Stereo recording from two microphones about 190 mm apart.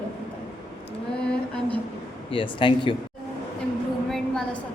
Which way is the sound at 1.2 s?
5° left (ahead or behind).